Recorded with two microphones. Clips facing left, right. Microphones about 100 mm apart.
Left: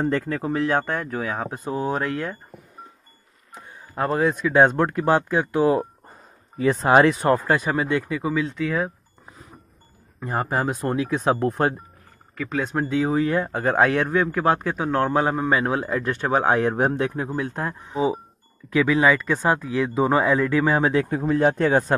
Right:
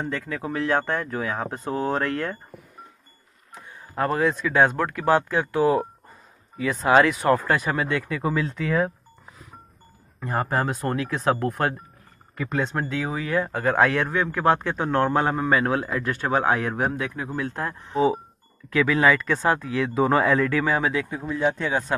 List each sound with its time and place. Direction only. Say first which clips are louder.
0.0 s speech: left 6 dB; 40° left (ahead or behind)
0.4 s a man's voice: left 2 dB; 20° left (ahead or behind)
3.9 s speech: left 1 dB; 20° left (ahead or behind)
6.6 s speech: left 2 dB; 30° left (ahead or behind)
8.2 s speech: left 1 dB; centre (ahead or behind)
10.2 s a man's voice: left 1 dB; 20° left (ahead or behind)
12.4 s speech: even; 5° right (ahead or behind)
12.6 s speech: left 4 dB; 15° left (ahead or behind)
13.1 s speech: left 5 dB; 30° left (ahead or behind)
13.4 s a man's voice: left 1 dB; 20° left (ahead or behind)
21.3 s speech: left 5 dB; 50° left (ahead or behind)